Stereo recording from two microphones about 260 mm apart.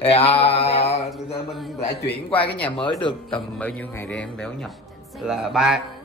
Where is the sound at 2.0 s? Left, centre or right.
Centre.